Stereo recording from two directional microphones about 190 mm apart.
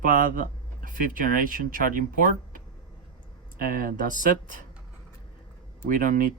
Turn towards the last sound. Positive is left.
turn(degrees=-45)  # may be behind; listen again after turning